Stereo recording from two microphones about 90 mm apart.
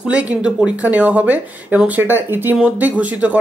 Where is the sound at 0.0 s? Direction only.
15° right (ahead or behind).